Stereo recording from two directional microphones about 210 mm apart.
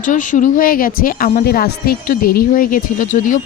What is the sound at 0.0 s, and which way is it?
Speech, 35° left (ahead or behind).